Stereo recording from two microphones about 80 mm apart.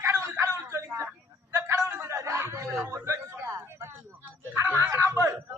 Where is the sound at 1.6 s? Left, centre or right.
Right.